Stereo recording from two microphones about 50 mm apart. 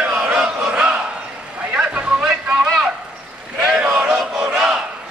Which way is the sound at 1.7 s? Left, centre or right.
Right.